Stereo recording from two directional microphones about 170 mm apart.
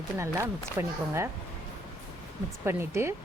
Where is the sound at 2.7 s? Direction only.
15° right (ahead or behind).